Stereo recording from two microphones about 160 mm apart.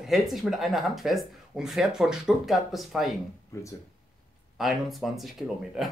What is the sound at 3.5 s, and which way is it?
Speech, 20° left (ahead or behind).